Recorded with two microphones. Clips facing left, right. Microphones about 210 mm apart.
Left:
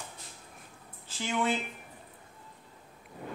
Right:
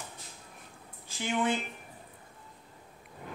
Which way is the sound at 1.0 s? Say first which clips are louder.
Right 1 dB; 20° right (ahead or behind).